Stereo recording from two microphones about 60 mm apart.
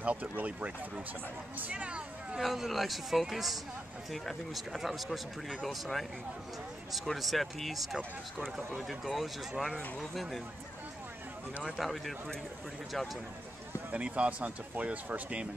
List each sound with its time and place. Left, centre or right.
0.0 s speech: right
2.4 s speech: centre
11.8 s speech: centre
13.9 s speech: right